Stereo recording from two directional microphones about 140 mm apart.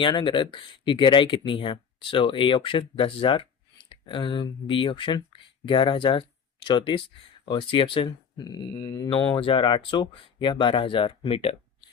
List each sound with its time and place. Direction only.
0.0 s speech: 35° left (ahead or behind)